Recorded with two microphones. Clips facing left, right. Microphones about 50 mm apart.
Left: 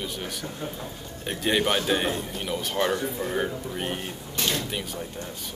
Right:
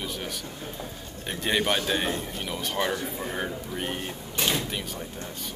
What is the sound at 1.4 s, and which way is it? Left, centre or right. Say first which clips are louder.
Speech: left 2 dB; centre.